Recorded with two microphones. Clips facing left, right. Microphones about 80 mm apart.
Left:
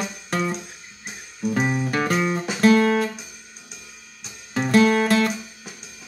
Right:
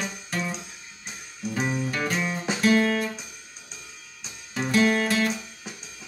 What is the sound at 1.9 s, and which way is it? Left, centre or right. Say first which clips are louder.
Music: left 5 dB; left.